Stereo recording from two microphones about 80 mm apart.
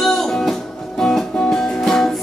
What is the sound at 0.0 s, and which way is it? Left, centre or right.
Music, centre.